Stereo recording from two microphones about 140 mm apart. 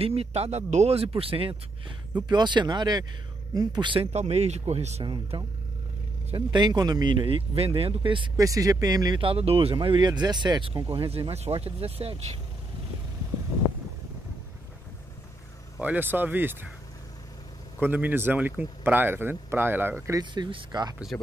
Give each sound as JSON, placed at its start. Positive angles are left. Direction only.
{"t": 0.0, "sound": "speech", "side_deg": -45}
{"t": 4.1, "sound": "speech", "side_deg": -50}
{"t": 5.0, "sound": "speech", "side_deg": -35}
{"t": 8.4, "sound": "speech", "side_deg": -25}
{"t": 9.2, "sound": "speech", "side_deg": -45}
{"t": 15.8, "sound": "speech", "side_deg": -10}
{"t": 17.7, "sound": "speech", "side_deg": -15}
{"t": 21.1, "sound": "speech", "side_deg": 15}